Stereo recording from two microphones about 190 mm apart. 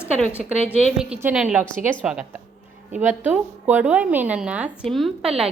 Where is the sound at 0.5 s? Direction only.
35° right (ahead or behind).